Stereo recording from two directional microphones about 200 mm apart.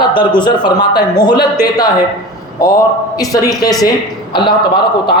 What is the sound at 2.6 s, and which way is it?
A man's voice, 15° left (ahead or behind).